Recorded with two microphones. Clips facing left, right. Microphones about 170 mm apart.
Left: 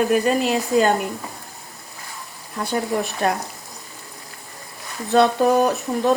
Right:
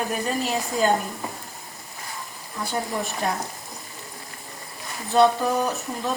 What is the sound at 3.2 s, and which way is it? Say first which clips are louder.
Speech: left 5 dB; 70° left (ahead or behind).